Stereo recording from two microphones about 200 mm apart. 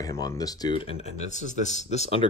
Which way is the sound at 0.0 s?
15° left (ahead or behind).